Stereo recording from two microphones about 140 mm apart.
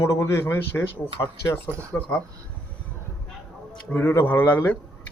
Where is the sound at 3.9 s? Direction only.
15° left (ahead or behind).